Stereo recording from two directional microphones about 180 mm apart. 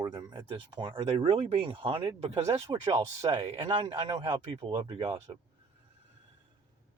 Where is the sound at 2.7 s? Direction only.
20° right (ahead or behind).